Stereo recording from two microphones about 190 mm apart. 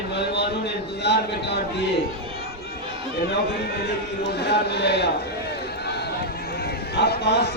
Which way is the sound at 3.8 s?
60° left (ahead or behind).